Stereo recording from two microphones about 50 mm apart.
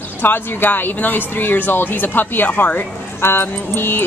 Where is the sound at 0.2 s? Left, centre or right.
Left.